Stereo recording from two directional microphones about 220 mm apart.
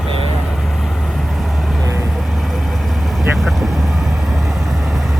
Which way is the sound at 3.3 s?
Centre (ahead or behind).